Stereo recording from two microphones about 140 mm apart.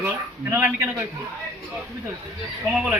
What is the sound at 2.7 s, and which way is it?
Speech, 5° right (ahead or behind).